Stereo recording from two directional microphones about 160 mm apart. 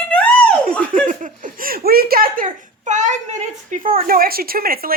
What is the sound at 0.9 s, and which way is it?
Speech, 55° right (ahead or behind).